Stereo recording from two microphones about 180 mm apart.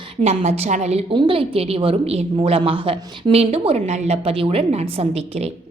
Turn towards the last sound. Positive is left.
turn(degrees=-35)  # may be behind; listen again after turning